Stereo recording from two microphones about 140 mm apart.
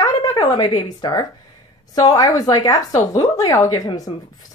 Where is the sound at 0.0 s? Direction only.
30° left (ahead or behind).